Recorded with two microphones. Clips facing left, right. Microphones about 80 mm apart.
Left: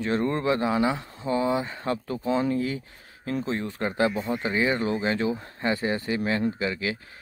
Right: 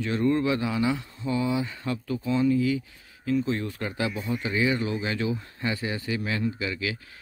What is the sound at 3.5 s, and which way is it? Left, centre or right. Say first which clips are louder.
Speech: left 3 dB; left.